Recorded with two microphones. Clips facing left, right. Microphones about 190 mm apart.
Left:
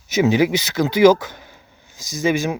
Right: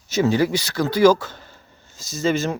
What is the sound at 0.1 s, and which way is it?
Speech, 20° left (ahead or behind).